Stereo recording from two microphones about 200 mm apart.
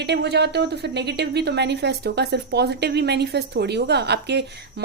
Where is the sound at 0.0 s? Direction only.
55° right (ahead or behind).